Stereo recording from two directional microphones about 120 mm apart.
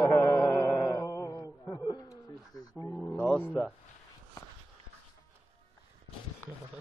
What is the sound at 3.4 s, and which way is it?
Speech, 15° left (ahead or behind).